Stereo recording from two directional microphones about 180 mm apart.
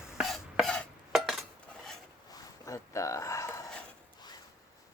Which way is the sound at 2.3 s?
15° left (ahead or behind).